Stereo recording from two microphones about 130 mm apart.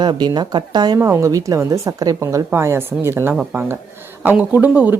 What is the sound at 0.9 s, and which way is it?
A woman's voice, 20° right (ahead or behind).